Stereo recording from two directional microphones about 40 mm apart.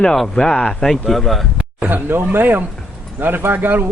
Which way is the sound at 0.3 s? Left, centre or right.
Centre.